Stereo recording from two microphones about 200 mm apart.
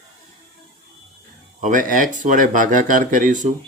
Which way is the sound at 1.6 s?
40° right (ahead or behind).